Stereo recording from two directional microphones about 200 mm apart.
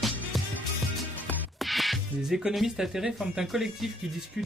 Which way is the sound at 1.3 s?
Centre (ahead or behind).